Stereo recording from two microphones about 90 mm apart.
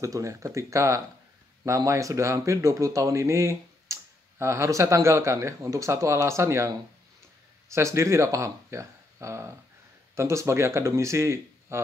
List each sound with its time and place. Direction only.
0.0 s speech: 35° right (ahead or behind)
7.7 s speech: 30° right (ahead or behind)